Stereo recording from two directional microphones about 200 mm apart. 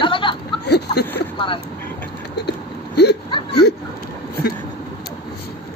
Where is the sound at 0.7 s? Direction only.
55° left (ahead or behind).